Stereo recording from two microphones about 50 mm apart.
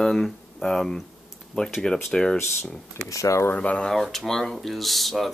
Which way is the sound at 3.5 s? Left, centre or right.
Left.